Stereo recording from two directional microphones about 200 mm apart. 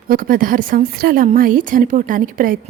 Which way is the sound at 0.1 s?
45° right (ahead or behind).